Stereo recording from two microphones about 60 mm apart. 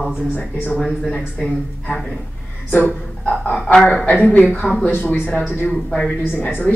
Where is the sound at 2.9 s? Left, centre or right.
Left.